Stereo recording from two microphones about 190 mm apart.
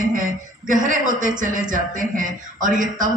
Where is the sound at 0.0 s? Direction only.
45° right (ahead or behind).